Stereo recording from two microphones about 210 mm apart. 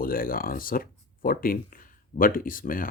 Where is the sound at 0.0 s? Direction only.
45° left (ahead or behind).